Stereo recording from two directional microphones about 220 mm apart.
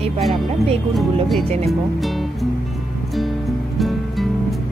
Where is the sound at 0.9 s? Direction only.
Centre (ahead or behind).